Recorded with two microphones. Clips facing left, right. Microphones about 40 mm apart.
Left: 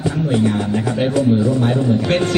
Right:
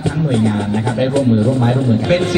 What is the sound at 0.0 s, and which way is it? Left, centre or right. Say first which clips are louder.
A man's voice: right 1 dB; right.